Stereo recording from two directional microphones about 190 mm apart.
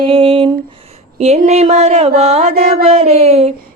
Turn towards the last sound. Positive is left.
turn(degrees=-35)  # may be behind; listen again after turning